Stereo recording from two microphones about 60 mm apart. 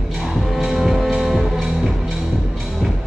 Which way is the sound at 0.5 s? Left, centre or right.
Centre.